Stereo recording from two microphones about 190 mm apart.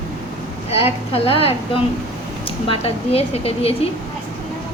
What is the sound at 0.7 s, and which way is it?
Speech, 30° left (ahead or behind).